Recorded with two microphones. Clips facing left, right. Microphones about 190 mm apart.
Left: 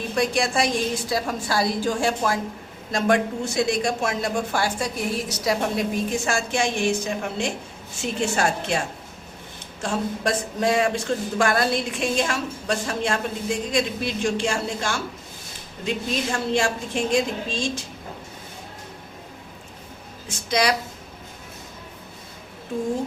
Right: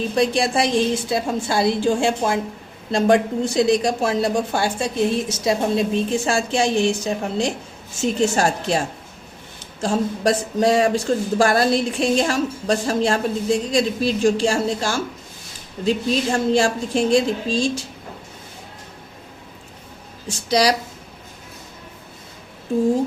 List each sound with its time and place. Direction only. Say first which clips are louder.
0.2 s a woman's voice: right 3 dB; 30° right (ahead or behind)
9.8 s speech: right 5 dB; 35° right (ahead or behind)
20.5 s speech: right 4 dB; 35° right (ahead or behind)